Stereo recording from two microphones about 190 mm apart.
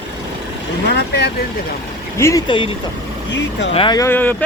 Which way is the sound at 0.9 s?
60° left (ahead or behind).